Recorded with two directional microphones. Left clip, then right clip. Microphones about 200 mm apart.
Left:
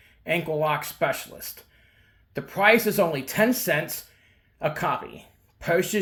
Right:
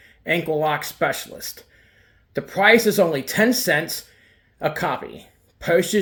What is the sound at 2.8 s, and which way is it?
Speech, 25° right (ahead or behind).